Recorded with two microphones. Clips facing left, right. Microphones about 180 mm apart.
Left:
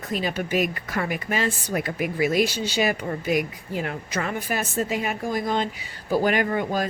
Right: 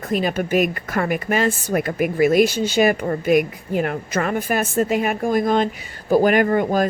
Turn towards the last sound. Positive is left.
turn(degrees=-50)  # may be behind; listen again after turning